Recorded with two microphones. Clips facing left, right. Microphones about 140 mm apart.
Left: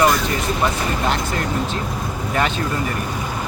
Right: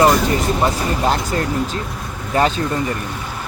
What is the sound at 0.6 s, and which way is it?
Speech, 35° right (ahead or behind).